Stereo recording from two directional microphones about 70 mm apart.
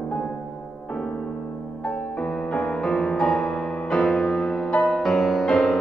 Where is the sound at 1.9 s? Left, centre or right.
Centre.